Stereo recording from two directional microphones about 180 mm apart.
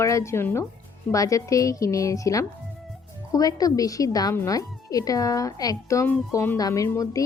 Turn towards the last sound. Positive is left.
turn(degrees=20)  # may be behind; listen again after turning